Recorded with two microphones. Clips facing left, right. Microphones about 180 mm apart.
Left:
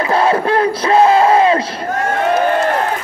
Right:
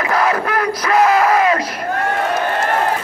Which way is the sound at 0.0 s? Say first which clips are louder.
Left 3 dB; 30° left (ahead or behind).